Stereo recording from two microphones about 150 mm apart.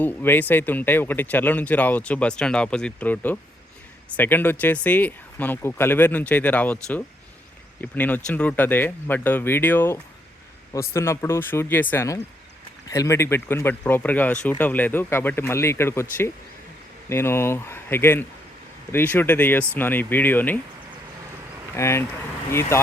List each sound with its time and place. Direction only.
0.0 s speech: 15° left (ahead or behind)
17.1 s speech: 15° left (ahead or behind)
21.8 s speech: 20° left (ahead or behind)